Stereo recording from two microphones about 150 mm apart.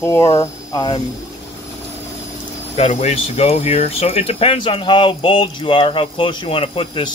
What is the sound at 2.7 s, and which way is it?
Speech, 45° left (ahead or behind).